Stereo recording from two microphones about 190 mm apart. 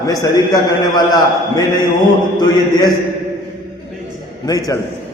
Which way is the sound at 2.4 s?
20° left (ahead or behind).